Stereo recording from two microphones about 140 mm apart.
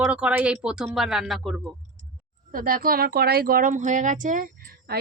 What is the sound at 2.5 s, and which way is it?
Speech, 90° right.